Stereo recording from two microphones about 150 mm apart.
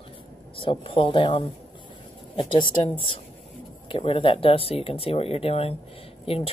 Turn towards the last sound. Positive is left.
turn(degrees=40)  # may be behind; listen again after turning